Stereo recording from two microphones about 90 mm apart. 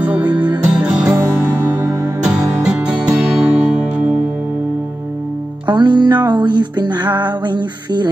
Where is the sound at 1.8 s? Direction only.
45° right (ahead or behind).